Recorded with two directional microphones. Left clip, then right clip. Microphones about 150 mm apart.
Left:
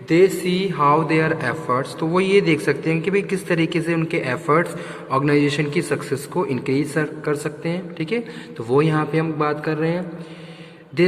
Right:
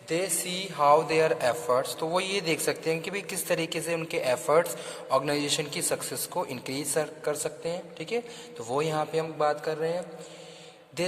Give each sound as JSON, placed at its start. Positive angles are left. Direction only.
{"t": 0.1, "sound": "a man's voice", "side_deg": -20}
{"t": 0.4, "sound": "a man's voice", "side_deg": -40}
{"t": 7.4, "sound": "a man's voice", "side_deg": -30}